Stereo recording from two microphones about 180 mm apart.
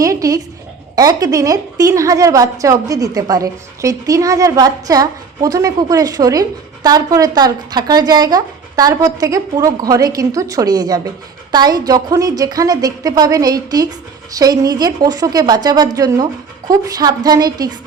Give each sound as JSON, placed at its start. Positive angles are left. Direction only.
{"t": 0.0, "sound": "a woman's voice", "side_deg": -20}